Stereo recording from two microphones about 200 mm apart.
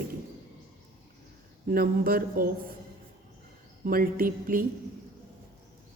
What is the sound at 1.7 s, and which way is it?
A woman's voice, 45° right (ahead or behind).